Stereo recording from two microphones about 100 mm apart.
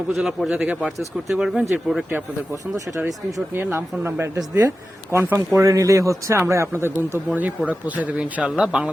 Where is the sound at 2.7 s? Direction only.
35° right (ahead or behind).